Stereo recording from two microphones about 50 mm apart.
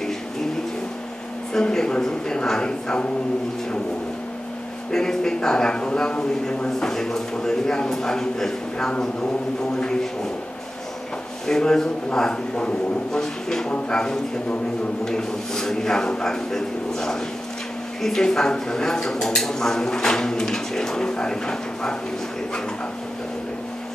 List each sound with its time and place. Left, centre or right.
1.5 s a man's voice: centre
4.9 s a man's voice: centre
11.4 s a man's voice: centre